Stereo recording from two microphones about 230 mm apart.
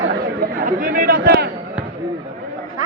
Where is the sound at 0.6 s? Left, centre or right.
Right.